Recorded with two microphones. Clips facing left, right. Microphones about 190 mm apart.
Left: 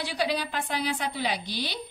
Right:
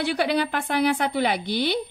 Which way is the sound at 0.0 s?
60° right (ahead or behind).